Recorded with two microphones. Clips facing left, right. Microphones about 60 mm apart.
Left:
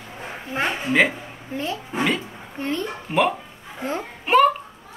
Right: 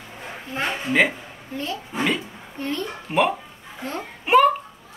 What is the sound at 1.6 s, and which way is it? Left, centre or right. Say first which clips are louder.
Speech: left 1 dB; left.